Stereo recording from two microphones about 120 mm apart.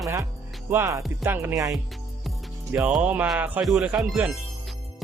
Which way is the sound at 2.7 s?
10° right (ahead or behind).